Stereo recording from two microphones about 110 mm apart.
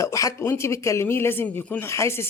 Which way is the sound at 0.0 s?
30° left (ahead or behind).